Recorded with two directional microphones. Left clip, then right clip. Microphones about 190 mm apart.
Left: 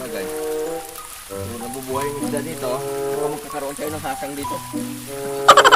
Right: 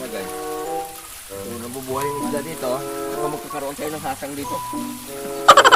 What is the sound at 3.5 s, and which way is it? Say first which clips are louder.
Frying: even; 5° right (ahead or behind).